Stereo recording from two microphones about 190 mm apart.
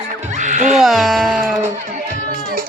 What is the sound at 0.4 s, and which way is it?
Music, 40° right (ahead or behind).